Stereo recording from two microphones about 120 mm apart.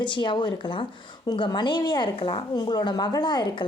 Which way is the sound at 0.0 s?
40° left (ahead or behind).